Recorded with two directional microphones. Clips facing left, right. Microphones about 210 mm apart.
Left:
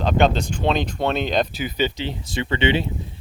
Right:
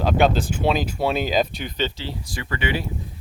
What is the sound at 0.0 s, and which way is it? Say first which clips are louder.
Speech: even; 5° right (ahead or behind).